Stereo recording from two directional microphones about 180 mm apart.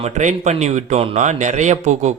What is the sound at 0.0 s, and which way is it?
A man's voice, 40° right (ahead or behind).